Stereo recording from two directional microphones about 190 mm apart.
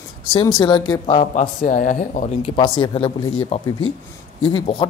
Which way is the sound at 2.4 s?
25° left (ahead or behind).